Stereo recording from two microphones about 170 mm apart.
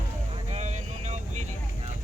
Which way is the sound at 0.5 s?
40° right (ahead or behind).